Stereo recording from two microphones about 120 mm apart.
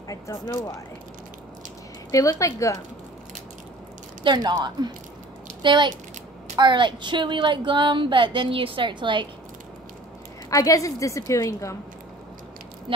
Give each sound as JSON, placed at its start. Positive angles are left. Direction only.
{"t": 0.1, "sound": "speech", "side_deg": 30}
{"t": 2.0, "sound": "a woman's voice", "side_deg": 25}
{"t": 4.2, "sound": "speech", "side_deg": -40}
{"t": 10.5, "sound": "a woman's voice", "side_deg": 30}